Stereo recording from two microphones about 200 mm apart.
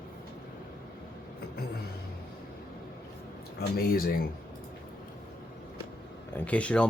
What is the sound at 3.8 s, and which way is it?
Speech, 45° left (ahead or behind).